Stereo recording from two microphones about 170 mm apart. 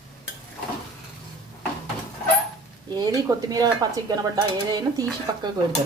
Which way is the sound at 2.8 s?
25° right (ahead or behind).